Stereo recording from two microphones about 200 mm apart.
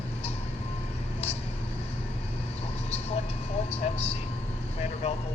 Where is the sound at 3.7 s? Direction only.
30° left (ahead or behind).